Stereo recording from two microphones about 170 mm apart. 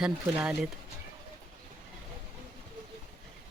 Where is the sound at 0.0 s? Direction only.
5° right (ahead or behind).